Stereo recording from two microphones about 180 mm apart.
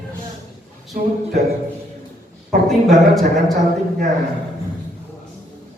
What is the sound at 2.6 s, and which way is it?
Speech, centre (ahead or behind).